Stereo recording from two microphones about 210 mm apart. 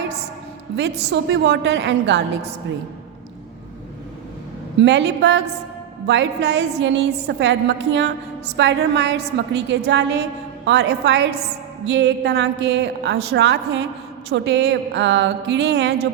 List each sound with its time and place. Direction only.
0.8 s a woman's voice: 55° right (ahead or behind)
4.8 s a woman's voice: 55° right (ahead or behind)